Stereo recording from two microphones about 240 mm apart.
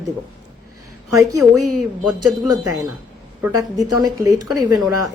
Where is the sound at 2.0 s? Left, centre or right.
Centre.